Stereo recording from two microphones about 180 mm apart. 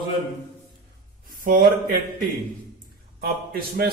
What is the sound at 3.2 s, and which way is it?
Speech, 55° right (ahead or behind).